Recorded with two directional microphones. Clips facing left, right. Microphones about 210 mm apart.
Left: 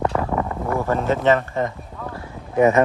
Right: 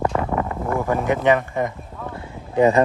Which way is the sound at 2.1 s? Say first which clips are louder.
Even; 30° right (ahead or behind).